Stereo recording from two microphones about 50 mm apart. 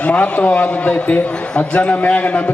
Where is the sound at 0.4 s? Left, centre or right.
Left.